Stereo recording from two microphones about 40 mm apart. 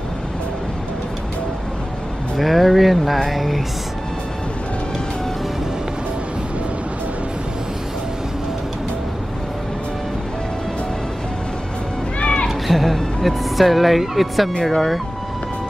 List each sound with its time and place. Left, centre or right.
2.3 s speech: centre
12.2 s a sound: left
12.4 s speech: centre